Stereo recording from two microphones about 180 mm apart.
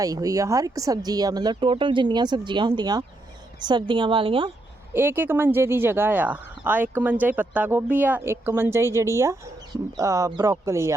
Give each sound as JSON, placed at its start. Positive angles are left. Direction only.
{"t": 0.0, "sound": "speech", "side_deg": -20}
{"t": 4.9, "sound": "speech", "side_deg": -10}